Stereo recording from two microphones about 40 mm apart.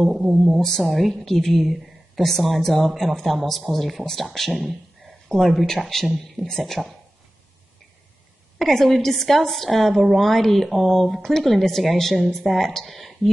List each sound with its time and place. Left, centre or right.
0.1 s speech: centre
0.4 s a woman's voice: centre
8.5 s a woman's voice: centre